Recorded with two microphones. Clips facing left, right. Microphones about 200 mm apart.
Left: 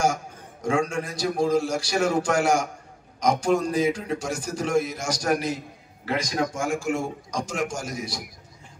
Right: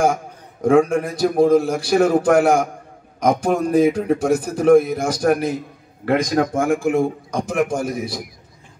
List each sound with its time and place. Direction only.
0.0 s a man's voice: 55° right (ahead or behind)